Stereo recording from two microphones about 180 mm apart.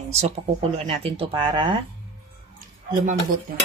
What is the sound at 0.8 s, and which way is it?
Speech, 30° right (ahead or behind).